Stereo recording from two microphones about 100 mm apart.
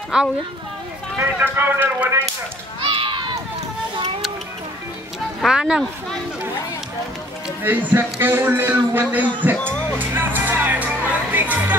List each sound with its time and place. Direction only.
1.1 s a man's voice: 20° right (ahead or behind)
2.8 s a sound: 60° right (ahead or behind)
5.4 s speech: 5° right (ahead or behind)
7.6 s a man's voice: 20° right (ahead or behind)
11.1 s music: 15° right (ahead or behind)